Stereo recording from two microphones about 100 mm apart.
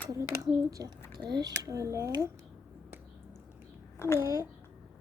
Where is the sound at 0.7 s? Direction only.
35° right (ahead or behind).